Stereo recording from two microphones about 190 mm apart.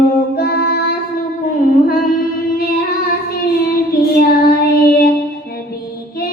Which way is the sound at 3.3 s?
55° left (ahead or behind).